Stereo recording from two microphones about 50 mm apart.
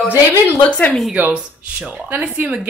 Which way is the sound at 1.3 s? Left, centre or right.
Right.